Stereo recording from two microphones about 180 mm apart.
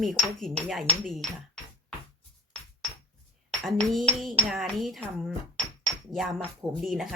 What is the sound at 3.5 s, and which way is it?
Speech, 5° left (ahead or behind).